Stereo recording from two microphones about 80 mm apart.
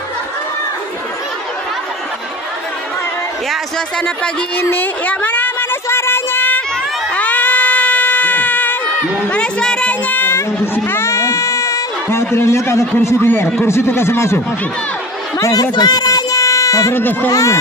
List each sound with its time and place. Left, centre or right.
4.6 s a sound: left
12.9 s speech: left
15.3 s chatter: left
15.6 s a sound: left
16.9 s speech: left
17.3 s speech: left